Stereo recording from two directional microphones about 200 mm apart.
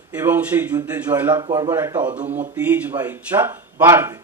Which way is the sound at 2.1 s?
35° right (ahead or behind).